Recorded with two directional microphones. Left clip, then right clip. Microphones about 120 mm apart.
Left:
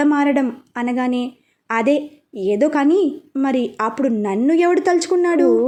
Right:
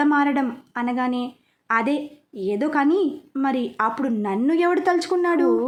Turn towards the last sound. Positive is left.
turn(degrees=20)  # may be behind; listen again after turning